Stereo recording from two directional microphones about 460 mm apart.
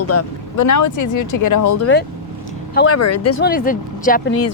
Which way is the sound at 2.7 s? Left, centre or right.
Left.